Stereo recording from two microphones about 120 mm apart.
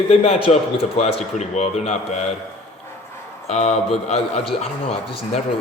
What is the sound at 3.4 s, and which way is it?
A man's voice, 60° left (ahead or behind).